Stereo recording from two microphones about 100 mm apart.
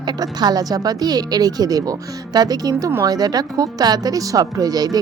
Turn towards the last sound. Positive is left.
turn(degrees=-40)  # may be behind; listen again after turning